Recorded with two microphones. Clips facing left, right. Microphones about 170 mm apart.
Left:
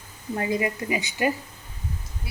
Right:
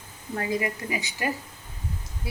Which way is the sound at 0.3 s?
20° left (ahead or behind).